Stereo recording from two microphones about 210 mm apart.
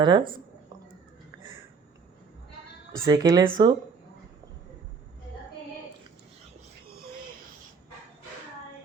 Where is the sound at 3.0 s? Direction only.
15° right (ahead or behind).